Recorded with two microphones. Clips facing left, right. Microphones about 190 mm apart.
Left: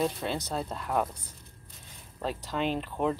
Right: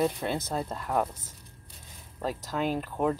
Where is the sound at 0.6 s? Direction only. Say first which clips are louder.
Even; centre (ahead or behind).